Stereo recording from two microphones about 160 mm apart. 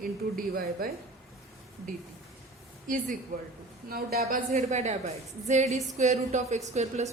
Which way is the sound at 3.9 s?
70° right (ahead or behind).